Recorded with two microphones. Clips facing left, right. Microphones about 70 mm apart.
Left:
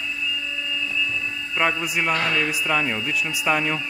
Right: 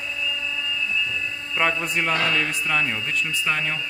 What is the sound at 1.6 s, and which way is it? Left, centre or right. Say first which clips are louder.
A man's voice: even; centre.